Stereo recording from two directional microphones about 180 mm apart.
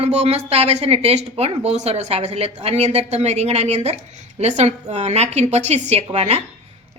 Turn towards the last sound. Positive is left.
turn(degrees=-35)  # may be behind; listen again after turning